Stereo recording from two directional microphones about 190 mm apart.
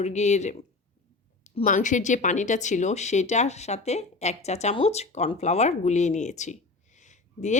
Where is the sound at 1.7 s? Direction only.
40° left (ahead or behind).